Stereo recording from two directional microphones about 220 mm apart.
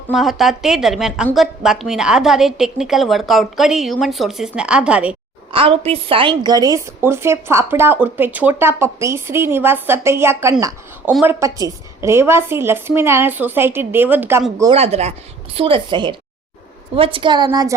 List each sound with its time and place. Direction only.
0.1 s a woman's voice: centre (ahead or behind)
5.5 s a woman's voice: 25° right (ahead or behind)
14.7 s a woman's voice: 30° right (ahead or behind)